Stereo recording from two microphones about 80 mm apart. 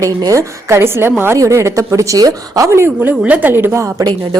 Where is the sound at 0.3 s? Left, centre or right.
Right.